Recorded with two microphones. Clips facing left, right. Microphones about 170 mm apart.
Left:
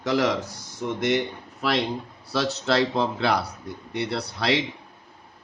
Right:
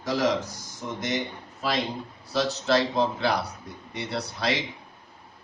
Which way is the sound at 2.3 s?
65° left (ahead or behind).